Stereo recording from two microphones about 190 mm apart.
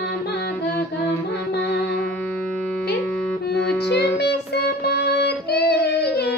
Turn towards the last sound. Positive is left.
turn(degrees=60)  # may be behind; listen again after turning